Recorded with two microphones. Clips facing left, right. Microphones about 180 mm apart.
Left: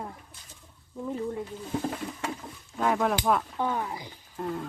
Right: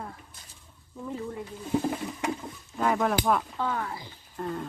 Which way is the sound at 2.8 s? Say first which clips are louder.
Even; centre (ahead or behind).